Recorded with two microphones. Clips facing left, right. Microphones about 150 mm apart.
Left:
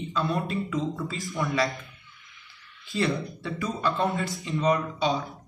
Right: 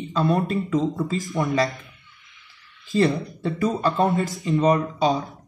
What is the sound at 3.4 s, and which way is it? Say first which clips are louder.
Speech: right 7 dB; 45° right (ahead or behind).